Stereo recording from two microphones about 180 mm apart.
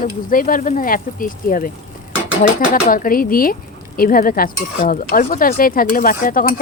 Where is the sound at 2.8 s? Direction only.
50° left (ahead or behind).